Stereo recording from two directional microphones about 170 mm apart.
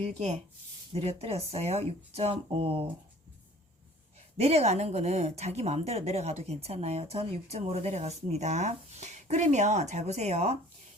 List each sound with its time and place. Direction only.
0.0 s speech: 40° right (ahead or behind)
4.4 s speech: 40° right (ahead or behind)